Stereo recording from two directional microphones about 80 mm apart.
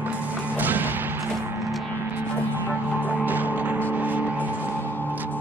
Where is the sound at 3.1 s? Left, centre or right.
Right.